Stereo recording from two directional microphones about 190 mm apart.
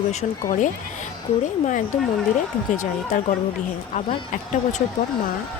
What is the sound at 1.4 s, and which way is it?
Speech, 40° left (ahead or behind).